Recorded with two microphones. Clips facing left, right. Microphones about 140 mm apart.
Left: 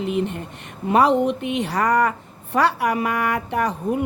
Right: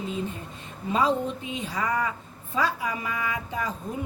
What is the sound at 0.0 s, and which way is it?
A woman's voice, 70° left (ahead or behind).